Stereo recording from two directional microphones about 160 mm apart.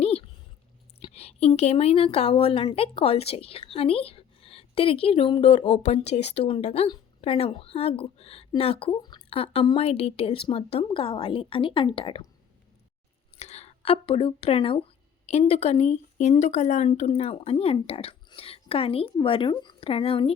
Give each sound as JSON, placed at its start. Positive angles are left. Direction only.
{"t": 0.0, "sound": "a sound", "side_deg": 40}
{"t": 0.9, "sound": "speech", "side_deg": 40}
{"t": 13.3, "sound": "speech", "side_deg": 40}